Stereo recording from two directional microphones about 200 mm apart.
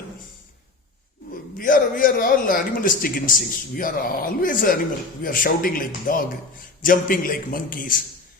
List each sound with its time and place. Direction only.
1.5 s speech: 45° left (ahead or behind)